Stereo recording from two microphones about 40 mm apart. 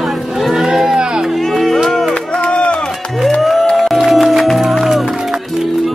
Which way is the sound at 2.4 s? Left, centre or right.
Left.